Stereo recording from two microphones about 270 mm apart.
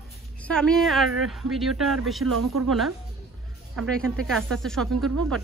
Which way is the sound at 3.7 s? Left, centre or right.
Centre.